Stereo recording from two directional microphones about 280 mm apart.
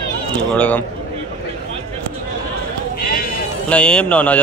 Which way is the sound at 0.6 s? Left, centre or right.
Centre.